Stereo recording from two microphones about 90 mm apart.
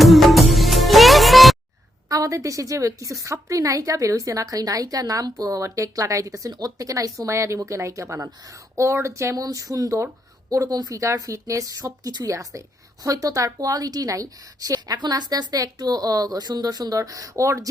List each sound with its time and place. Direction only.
0.0 s music: centre (ahead or behind)
2.0 s a woman's voice: 40° right (ahead or behind)